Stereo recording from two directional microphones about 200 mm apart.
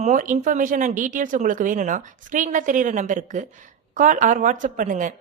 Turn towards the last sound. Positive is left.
turn(degrees=-40)  # may be behind; listen again after turning